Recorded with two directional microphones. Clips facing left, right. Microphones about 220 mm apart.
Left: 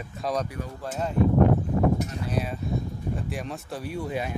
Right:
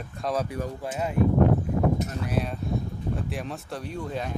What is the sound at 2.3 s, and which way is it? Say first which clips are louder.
Speech: even; 5° left (ahead or behind).